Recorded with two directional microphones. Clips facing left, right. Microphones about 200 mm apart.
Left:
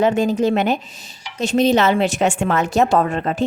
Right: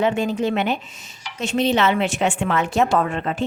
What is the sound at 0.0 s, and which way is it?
Speech, 40° left (ahead or behind).